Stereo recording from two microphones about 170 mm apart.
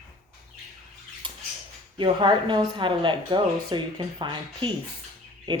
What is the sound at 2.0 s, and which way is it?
Speech, 25° right (ahead or behind).